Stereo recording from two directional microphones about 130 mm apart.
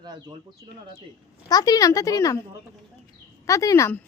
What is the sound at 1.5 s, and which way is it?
Speech, 30° left (ahead or behind).